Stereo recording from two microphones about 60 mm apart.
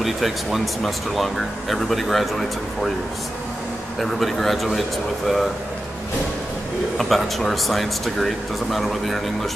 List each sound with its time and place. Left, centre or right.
0.0 s speech: centre
4.0 s speech: centre
7.0 s speech: centre